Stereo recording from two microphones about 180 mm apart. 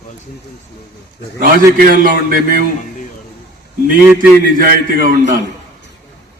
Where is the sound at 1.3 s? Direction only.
50° right (ahead or behind).